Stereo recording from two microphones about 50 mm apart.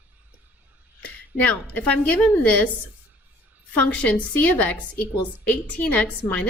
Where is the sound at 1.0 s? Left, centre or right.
Left.